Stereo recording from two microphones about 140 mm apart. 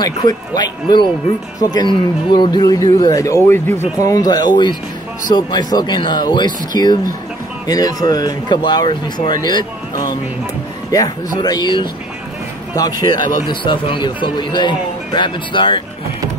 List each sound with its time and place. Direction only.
0.6 s speech: 30° left (ahead or behind)